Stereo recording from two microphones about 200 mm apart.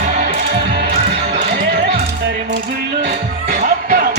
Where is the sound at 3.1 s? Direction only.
40° right (ahead or behind).